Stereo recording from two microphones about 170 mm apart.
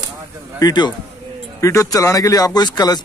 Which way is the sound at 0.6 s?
25° left (ahead or behind).